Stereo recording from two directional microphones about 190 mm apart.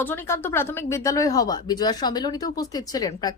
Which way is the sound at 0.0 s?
10° left (ahead or behind).